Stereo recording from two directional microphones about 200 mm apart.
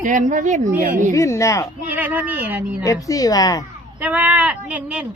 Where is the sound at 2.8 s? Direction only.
15° left (ahead or behind).